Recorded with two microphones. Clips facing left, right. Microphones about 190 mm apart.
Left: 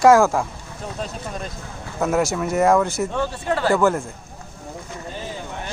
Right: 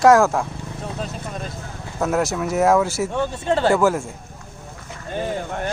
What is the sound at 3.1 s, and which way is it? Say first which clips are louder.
Speech: right 2 dB; 20° right (ahead or behind).